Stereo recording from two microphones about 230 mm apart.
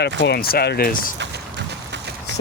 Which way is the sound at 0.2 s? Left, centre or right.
Left.